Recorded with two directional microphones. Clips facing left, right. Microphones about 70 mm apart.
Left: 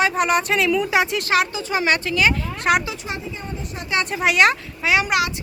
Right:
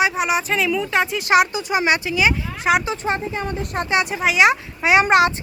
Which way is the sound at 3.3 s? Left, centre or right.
Right.